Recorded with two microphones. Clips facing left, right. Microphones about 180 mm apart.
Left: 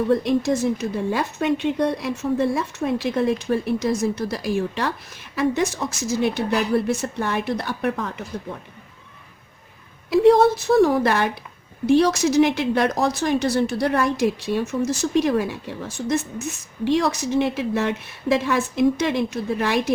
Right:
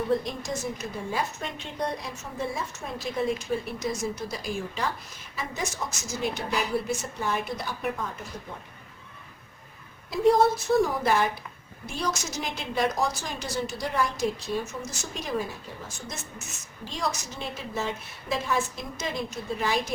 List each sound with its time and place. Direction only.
0.1 s a woman's voice: 65° left (ahead or behind)
1.1 s speech: 70° left (ahead or behind)
10.1 s speech: 75° left (ahead or behind)